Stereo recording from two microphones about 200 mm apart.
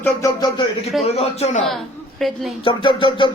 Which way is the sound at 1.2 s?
30° left (ahead or behind).